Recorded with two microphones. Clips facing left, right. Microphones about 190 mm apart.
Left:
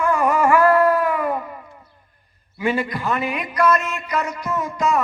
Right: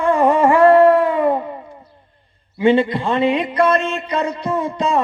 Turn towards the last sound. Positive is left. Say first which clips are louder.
# right 3 dB
turn(degrees=-30)  # may be behind; listen again after turning